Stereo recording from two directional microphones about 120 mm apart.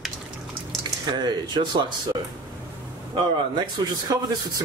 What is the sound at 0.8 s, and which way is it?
Speech, 35° right (ahead or behind).